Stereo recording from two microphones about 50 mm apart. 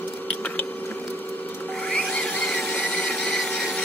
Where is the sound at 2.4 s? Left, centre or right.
Centre.